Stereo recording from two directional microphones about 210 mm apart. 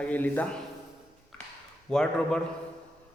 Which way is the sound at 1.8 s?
5° left (ahead or behind).